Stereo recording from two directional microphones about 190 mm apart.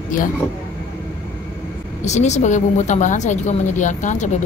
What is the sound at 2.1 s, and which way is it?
A woman's voice, 40° left (ahead or behind).